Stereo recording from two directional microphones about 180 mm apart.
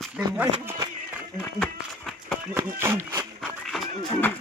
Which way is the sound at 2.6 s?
15° right (ahead or behind).